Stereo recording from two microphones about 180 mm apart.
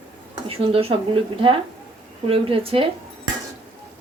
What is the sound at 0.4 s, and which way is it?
A woman's voice, 30° right (ahead or behind).